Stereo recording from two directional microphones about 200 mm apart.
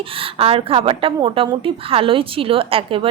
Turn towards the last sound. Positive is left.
turn(degrees=-25)  # may be behind; listen again after turning